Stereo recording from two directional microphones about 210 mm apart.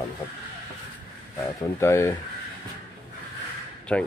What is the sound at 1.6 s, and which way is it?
Speech, 15° left (ahead or behind).